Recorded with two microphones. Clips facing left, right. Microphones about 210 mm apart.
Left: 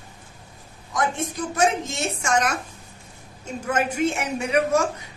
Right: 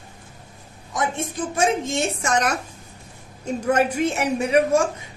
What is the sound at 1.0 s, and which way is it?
A woman's voice, 25° right (ahead or behind).